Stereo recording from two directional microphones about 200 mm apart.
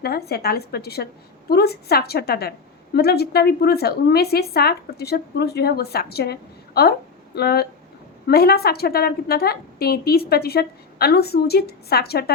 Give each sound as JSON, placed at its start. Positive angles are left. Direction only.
{"t": 0.0, "sound": "a woman's voice", "side_deg": 50}